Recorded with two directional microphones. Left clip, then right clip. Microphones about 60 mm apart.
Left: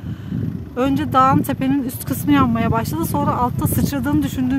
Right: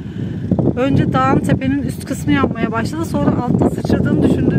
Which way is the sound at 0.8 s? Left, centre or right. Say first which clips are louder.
Left 3 dB; left.